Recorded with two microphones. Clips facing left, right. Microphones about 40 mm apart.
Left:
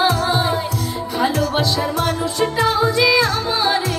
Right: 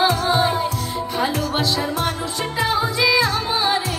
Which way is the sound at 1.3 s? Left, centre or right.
Centre.